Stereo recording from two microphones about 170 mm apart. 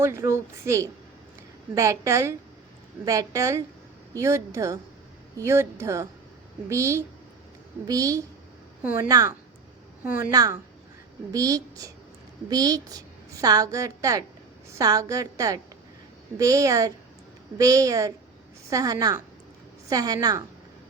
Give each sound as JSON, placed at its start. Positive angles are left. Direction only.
{"t": 0.0, "sound": "a woman's voice", "side_deg": -15}
{"t": 10.1, "sound": "a woman's voice", "side_deg": 55}
{"t": 10.3, "sound": "a woman's voice", "side_deg": -20}